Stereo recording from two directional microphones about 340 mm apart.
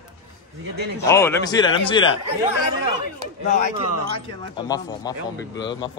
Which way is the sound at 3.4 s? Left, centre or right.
Left.